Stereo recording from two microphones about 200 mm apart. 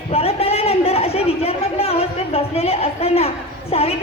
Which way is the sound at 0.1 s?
30° left (ahead or behind).